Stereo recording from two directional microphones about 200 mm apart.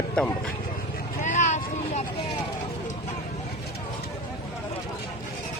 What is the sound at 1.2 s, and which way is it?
Vehicle, 35° left (ahead or behind).